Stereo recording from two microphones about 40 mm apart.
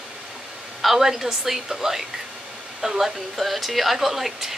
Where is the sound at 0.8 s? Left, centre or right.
Centre.